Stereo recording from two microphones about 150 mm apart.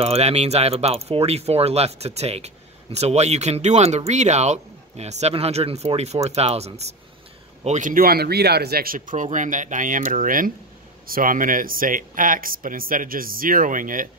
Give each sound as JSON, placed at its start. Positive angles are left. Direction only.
{"t": 0.0, "sound": "speech", "side_deg": -45}
{"t": 7.6, "sound": "speech", "side_deg": -55}